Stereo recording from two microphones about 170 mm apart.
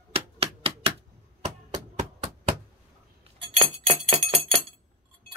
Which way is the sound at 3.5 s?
35° right (ahead or behind).